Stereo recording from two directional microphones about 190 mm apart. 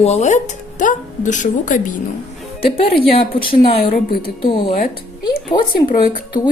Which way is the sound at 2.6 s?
30° left (ahead or behind).